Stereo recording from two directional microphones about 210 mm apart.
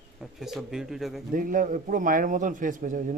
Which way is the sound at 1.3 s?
40° right (ahead or behind).